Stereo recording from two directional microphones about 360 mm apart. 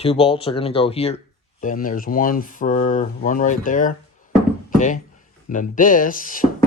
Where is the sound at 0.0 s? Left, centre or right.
Centre.